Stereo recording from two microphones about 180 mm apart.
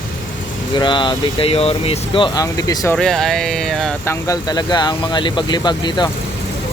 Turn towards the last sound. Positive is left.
turn(degrees=25)  # may be behind; listen again after turning